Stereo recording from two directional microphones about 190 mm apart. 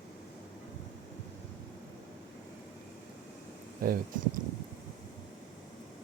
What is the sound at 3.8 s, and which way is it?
Speech, 50° right (ahead or behind).